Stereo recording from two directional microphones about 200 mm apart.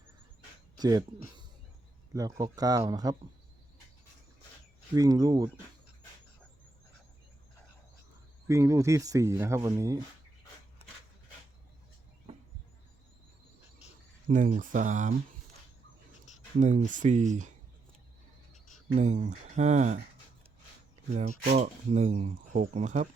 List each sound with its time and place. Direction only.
0.8 s speech: 20° right (ahead or behind)
2.1 s speech: 15° right (ahead or behind)
4.9 s speech: 15° right (ahead or behind)
8.4 s speech: 15° right (ahead or behind)
14.3 s speech: 40° right (ahead or behind)
16.6 s speech: 35° right (ahead or behind)
18.9 s speech: 35° right (ahead or behind)
21.1 s speech: 35° right (ahead or behind)